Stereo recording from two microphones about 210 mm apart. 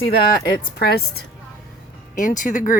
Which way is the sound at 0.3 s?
45° left (ahead or behind).